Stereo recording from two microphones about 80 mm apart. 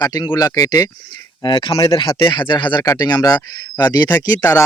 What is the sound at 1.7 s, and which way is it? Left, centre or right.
Speech, left.